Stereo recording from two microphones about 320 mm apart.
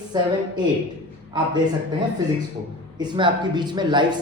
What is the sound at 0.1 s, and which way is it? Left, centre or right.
Speech, centre.